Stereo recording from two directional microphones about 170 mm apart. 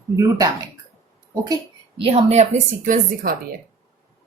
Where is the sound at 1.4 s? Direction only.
25° right (ahead or behind).